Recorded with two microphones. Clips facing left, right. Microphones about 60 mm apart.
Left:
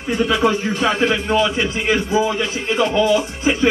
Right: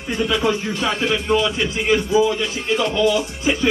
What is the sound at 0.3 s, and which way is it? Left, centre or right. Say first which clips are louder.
Speech: left 2 dB; left.